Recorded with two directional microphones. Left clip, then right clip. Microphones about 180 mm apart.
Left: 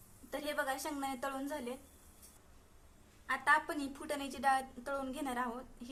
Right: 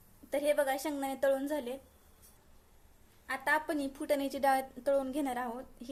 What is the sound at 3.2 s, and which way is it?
A woman's voice, 30° right (ahead or behind).